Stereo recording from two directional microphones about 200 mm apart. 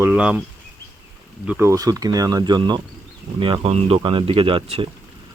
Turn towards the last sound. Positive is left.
turn(degrees=-30)  # may be behind; listen again after turning